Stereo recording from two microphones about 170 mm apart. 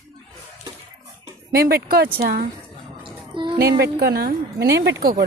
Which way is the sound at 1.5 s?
65° right (ahead or behind).